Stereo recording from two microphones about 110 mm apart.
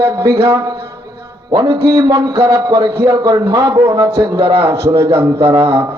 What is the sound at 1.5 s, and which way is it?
Music, 35° right (ahead or behind).